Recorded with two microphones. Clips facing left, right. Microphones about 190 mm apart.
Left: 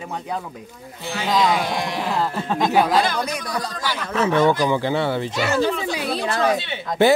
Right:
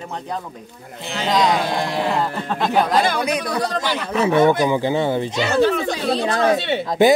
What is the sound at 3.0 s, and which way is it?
Speech, 55° right (ahead or behind).